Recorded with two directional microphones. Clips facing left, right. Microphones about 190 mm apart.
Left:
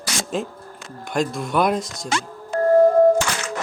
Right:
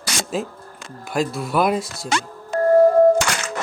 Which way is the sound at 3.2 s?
80° right.